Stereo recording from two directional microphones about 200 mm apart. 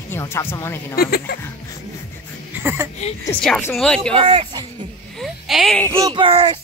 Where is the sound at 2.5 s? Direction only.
10° right (ahead or behind).